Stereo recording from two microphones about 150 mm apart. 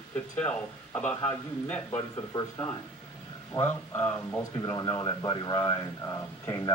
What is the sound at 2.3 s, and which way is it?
Speech, 20° left (ahead or behind).